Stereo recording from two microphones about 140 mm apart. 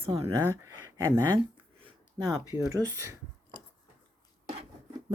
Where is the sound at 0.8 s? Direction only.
25° right (ahead or behind).